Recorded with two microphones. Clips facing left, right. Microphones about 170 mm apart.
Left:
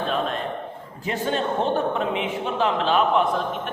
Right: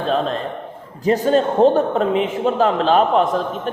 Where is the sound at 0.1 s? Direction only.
35° right (ahead or behind).